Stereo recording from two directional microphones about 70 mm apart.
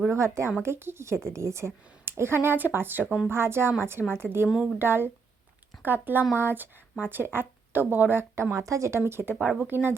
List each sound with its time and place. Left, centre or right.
0.1 s a woman's voice: right
4.4 s speech: centre
4.8 s a woman's voice: right